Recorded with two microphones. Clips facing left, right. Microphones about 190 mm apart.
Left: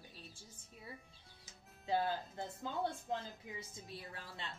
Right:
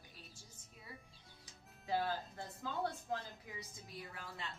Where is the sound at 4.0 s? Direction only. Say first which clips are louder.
Right 3 dB; 30° left (ahead or behind).